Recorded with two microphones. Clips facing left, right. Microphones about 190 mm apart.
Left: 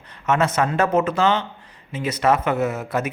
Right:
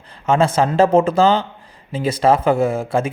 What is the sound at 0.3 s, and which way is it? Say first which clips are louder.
Speech: right 4 dB; 30° right (ahead or behind).